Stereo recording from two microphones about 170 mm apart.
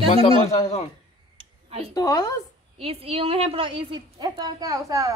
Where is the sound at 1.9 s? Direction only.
20° left (ahead or behind).